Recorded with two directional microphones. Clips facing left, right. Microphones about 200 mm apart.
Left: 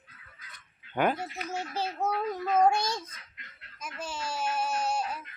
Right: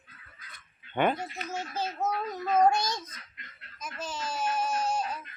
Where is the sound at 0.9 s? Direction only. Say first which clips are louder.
Even; 5° left (ahead or behind).